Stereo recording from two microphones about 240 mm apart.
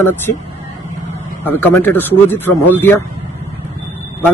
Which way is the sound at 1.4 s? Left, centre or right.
Centre.